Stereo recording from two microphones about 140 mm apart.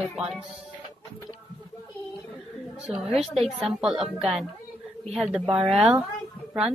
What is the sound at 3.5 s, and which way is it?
A woman's voice, 5° right (ahead or behind).